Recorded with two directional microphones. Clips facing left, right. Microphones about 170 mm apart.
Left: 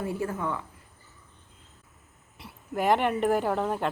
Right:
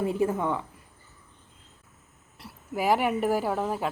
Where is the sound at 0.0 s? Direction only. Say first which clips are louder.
Right 5 dB; 20° right (ahead or behind).